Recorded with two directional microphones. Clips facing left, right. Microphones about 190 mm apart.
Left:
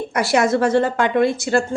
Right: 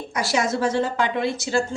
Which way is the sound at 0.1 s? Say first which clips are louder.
Left 6 dB; 60° left (ahead or behind).